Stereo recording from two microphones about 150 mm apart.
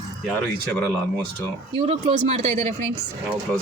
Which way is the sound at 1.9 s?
45° right (ahead or behind).